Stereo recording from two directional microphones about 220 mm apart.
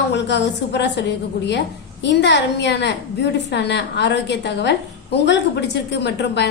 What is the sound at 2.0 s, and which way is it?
A woman's voice, 50° left (ahead or behind).